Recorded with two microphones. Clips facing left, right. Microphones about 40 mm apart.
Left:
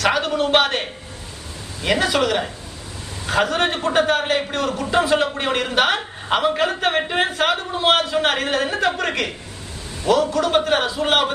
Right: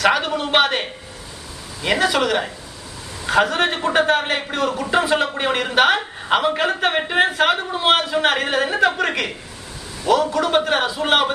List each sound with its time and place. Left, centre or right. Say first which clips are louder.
0.0 s a man's voice: right 1 dB; centre
1.9 s a man's voice: right 1 dB; centre